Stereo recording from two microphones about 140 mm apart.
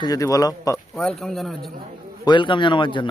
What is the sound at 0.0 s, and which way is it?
Speech, 25° left (ahead or behind).